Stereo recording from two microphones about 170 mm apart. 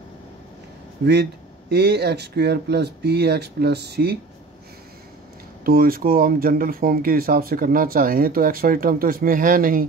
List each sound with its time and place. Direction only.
1.7 s speech: 75° right (ahead or behind)
5.6 s speech: 60° right (ahead or behind)